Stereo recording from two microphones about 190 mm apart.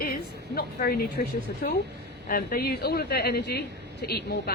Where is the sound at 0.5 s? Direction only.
55° left (ahead or behind).